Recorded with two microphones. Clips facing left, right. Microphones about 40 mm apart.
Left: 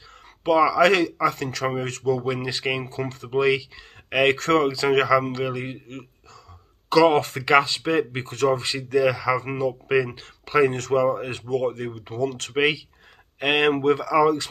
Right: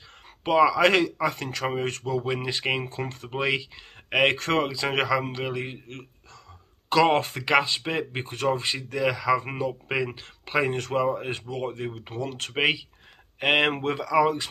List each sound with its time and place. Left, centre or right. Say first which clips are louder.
0.4 s a man's voice: left 2 dB; centre
7.3 s a man's voice: left 4 dB; centre
10.1 s speech: left 5 dB; right
12.5 s a man's voice: left 2 dB; centre